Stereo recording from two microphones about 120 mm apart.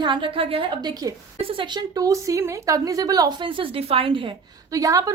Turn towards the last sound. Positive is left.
turn(degrees=-30)  # may be behind; listen again after turning